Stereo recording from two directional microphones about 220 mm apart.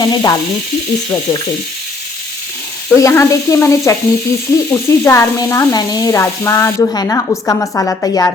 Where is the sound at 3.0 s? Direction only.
15° left (ahead or behind).